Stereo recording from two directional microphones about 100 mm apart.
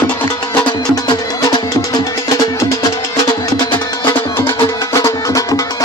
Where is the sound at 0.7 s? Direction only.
45° left (ahead or behind).